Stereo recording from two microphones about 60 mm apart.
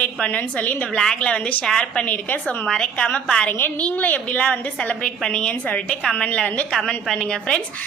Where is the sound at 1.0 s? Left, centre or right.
Centre.